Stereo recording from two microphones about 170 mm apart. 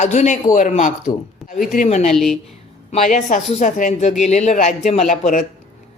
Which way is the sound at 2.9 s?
45° left (ahead or behind).